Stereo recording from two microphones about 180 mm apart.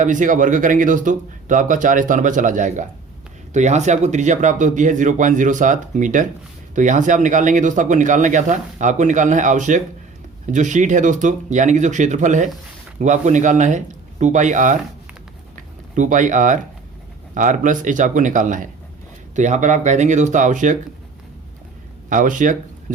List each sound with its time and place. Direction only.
0.0 s speech: 45° right (ahead or behind)
15.5 s a sound: 45° right (ahead or behind)
17.3 s speech: 45° right (ahead or behind)
22.1 s speech: 45° right (ahead or behind)